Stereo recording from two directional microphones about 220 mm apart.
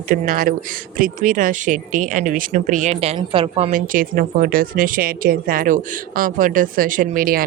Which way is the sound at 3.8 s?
40° right (ahead or behind).